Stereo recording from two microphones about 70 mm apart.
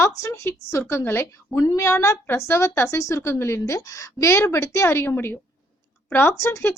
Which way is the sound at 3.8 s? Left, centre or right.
Left.